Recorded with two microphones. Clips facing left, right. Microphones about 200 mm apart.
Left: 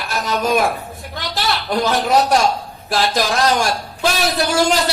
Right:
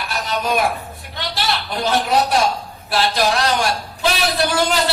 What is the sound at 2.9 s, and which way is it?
Speech, 45° left (ahead or behind).